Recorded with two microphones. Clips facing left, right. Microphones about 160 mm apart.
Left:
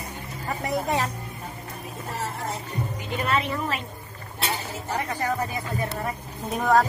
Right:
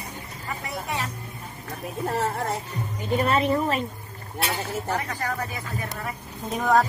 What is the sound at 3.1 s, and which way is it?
Speech, 40° right (ahead or behind).